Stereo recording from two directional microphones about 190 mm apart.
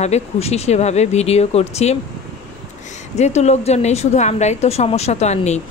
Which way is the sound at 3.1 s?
35° left (ahead or behind).